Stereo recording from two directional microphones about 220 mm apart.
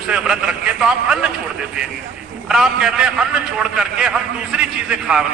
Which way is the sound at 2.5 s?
Centre (ahead or behind).